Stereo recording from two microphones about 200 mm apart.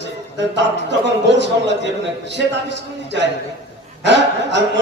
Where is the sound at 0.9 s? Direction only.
60° right (ahead or behind).